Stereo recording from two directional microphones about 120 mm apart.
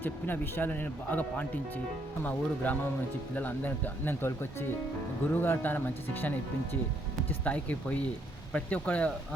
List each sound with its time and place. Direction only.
0.0 s speech: 15° left (ahead or behind)